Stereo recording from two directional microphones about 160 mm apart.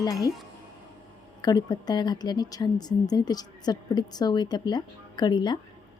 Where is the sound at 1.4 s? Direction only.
25° left (ahead or behind).